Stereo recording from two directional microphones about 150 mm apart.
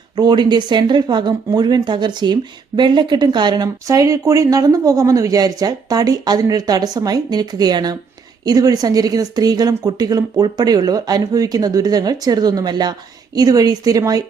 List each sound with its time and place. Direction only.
0.2 s speech: 30° right (ahead or behind)